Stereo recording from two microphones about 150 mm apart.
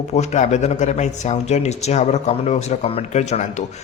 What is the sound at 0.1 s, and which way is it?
A man's voice, 50° left (ahead or behind).